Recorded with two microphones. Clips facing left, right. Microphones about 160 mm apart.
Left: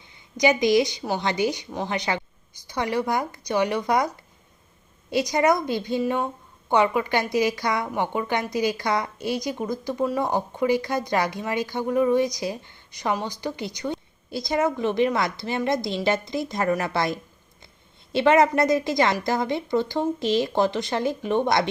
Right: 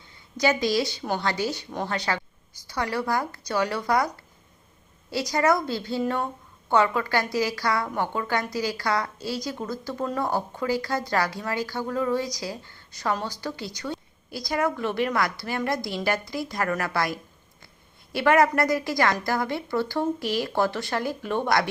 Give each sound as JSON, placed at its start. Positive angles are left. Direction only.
{"t": 0.3, "sound": "a woman's voice", "side_deg": 15}
{"t": 5.1, "sound": "a woman's voice", "side_deg": 20}